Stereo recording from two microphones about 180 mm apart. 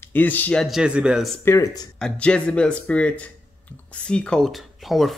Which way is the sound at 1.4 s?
15° left (ahead or behind).